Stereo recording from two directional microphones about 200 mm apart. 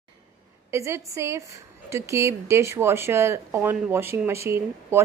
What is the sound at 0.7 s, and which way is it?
Speech, 15° right (ahead or behind).